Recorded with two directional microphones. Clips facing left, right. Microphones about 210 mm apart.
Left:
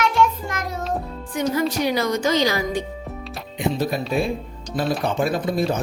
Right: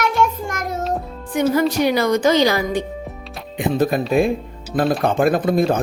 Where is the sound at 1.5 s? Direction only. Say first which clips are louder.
Right 3 dB; 60° right (ahead or behind).